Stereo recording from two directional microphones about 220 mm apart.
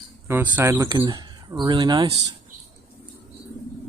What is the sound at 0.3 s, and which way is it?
Speech, 10° right (ahead or behind).